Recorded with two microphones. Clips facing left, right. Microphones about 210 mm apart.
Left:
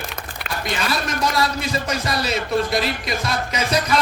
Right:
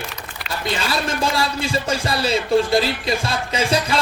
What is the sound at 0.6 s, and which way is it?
Speech, 30° right (ahead or behind).